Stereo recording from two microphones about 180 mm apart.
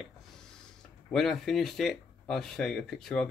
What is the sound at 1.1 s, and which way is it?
Speech, centre (ahead or behind).